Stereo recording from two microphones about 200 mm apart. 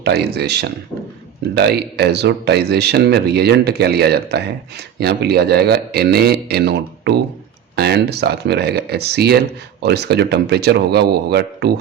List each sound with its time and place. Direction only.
0.0 s a man's voice: 55° right (ahead or behind)